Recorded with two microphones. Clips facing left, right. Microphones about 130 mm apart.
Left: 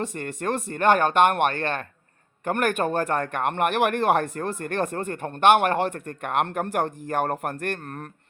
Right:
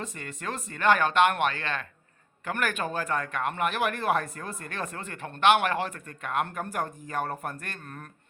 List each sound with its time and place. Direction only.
0.2 s speech: 55° left (ahead or behind)